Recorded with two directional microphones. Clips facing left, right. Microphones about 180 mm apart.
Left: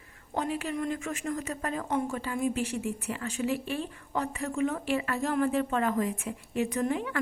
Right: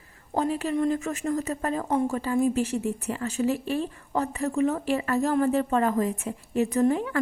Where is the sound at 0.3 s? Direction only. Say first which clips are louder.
Right 6 dB; 40° right (ahead or behind).